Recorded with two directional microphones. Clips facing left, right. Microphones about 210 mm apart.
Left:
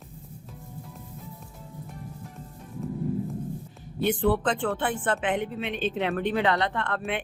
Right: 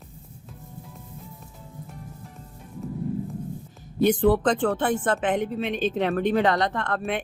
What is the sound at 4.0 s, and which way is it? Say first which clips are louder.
Speech: right 5 dB; 40° right (ahead or behind).